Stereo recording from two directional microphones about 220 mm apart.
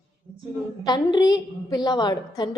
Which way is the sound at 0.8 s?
20° left (ahead or behind).